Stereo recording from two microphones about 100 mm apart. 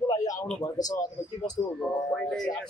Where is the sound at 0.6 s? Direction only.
35° left (ahead or behind).